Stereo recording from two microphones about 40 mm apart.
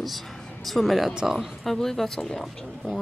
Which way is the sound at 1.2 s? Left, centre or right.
Centre.